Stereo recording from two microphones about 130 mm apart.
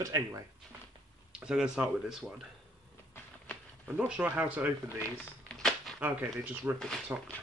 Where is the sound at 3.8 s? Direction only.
10° right (ahead or behind).